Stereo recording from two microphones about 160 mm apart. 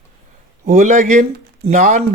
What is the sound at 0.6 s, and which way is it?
Speech, 50° right (ahead or behind).